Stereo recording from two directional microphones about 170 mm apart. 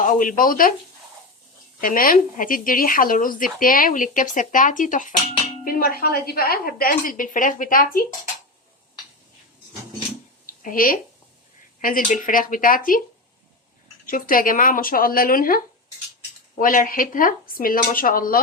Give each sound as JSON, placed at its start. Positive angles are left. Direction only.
{"t": 0.0, "sound": "speech", "side_deg": 50}
{"t": 1.8, "sound": "speech", "side_deg": 55}
{"t": 5.6, "sound": "a woman's voice", "side_deg": 60}
{"t": 10.4, "sound": "a sound", "side_deg": 55}
{"t": 11.8, "sound": "speech", "side_deg": 55}
{"t": 14.1, "sound": "a woman's voice", "side_deg": 55}